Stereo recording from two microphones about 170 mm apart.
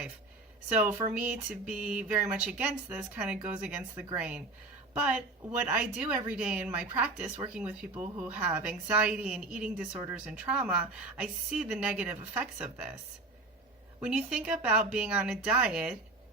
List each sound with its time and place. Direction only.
0.9 s speech: 20° right (ahead or behind)
1.1 s a woman's voice: 5° right (ahead or behind)
1.8 s a sound: 5° right (ahead or behind)
2.3 s a woman's voice: 5° right (ahead or behind)
4.2 s a sound: 5° right (ahead or behind)
4.9 s a woman's voice: 5° right (ahead or behind)
14.0 s a woman's voice: 5° right (ahead or behind)